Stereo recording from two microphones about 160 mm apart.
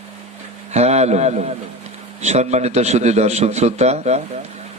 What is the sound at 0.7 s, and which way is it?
A man's voice, 45° right (ahead or behind).